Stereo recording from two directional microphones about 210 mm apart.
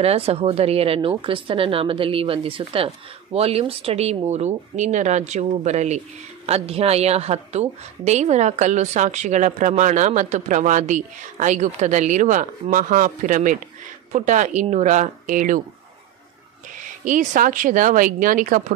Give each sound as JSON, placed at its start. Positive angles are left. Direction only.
{"t": 0.0, "sound": "a woman's voice", "side_deg": -30}
{"t": 17.0, "sound": "a woman's voice", "side_deg": -35}